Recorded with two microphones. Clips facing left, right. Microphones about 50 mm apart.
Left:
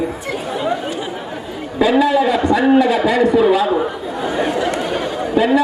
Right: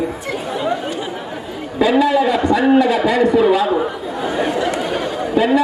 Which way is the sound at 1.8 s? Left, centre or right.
Centre.